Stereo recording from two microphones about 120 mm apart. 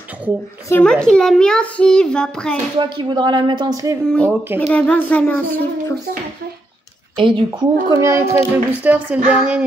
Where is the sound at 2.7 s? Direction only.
40° right (ahead or behind).